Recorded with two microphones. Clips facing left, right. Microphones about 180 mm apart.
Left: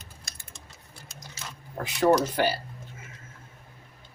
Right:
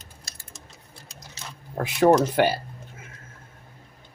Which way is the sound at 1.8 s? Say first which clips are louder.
Right 4 dB; 65° right (ahead or behind).